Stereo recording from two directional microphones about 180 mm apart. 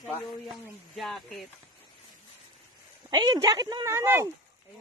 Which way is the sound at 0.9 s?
Centre (ahead or behind).